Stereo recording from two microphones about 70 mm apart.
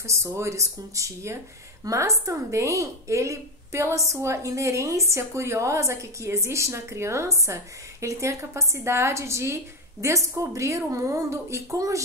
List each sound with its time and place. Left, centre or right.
0.0 s a woman's voice: right